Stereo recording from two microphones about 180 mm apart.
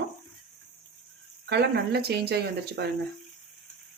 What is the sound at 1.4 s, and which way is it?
Speech, 65° right (ahead or behind).